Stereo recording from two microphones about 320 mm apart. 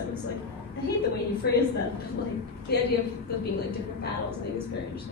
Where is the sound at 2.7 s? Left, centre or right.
Left.